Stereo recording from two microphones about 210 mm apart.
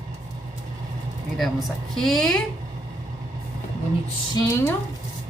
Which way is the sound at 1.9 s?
Centre (ahead or behind).